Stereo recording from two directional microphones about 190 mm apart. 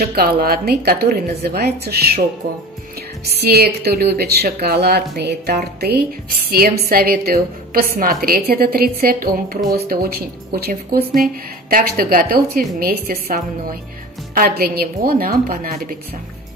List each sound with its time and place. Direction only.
0.0 s speech: 55° right (ahead or behind)
3.4 s a woman's voice: 55° right (ahead or behind)